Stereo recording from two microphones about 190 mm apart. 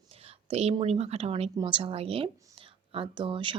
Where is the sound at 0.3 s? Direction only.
30° right (ahead or behind).